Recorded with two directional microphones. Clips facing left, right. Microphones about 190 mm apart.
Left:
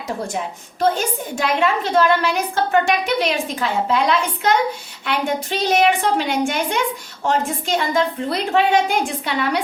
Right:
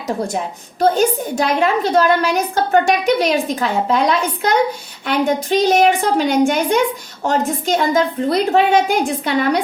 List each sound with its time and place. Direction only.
0.8 s a woman's voice: 40° right (ahead or behind)
5.0 s a woman's voice: 45° right (ahead or behind)